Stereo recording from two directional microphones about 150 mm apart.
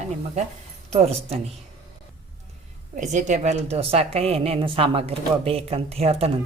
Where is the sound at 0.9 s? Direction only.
45° right (ahead or behind).